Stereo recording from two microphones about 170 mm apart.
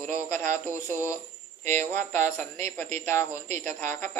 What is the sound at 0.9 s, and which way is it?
Speech, 10° right (ahead or behind).